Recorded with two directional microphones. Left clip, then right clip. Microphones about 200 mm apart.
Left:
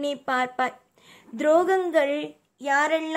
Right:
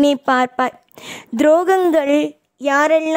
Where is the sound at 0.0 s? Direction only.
50° right (ahead or behind).